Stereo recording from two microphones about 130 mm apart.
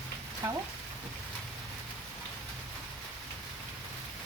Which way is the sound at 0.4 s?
20° right (ahead or behind).